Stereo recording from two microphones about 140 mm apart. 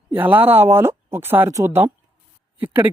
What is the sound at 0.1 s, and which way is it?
Speech, 15° right (ahead or behind).